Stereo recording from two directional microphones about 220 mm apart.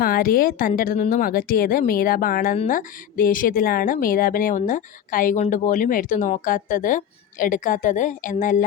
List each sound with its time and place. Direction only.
0.0 s a woman's voice: 40° left (ahead or behind)